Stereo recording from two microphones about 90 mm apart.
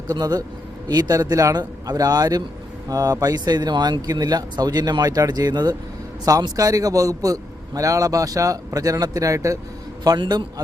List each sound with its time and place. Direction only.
0.1 s a man's voice: 50° right (ahead or behind)
10.2 s speech: 50° right (ahead or behind)